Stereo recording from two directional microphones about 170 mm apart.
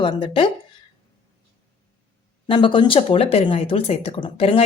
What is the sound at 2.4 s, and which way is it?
Speech, 30° left (ahead or behind).